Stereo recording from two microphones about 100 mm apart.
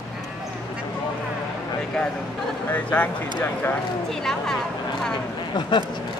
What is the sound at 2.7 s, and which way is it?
Speech, 15° left (ahead or behind).